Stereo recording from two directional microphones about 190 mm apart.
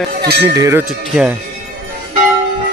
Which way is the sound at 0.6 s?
15° right (ahead or behind).